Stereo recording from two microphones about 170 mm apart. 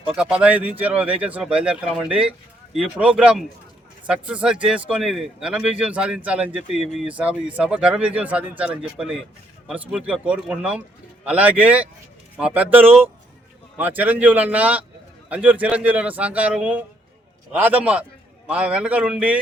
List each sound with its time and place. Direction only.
0.1 s a man's voice: 5° right (ahead or behind)